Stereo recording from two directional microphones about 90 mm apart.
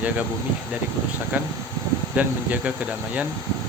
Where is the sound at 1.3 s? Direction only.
20° right (ahead or behind).